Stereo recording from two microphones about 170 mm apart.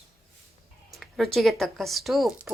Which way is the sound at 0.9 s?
Centre (ahead or behind).